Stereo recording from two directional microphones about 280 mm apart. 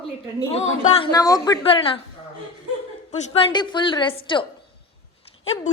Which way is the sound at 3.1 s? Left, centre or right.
Centre.